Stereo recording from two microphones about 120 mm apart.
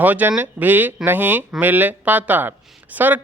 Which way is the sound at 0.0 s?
15° right (ahead or behind).